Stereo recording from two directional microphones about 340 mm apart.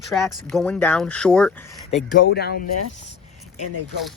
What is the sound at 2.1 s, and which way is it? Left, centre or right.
Speech, left.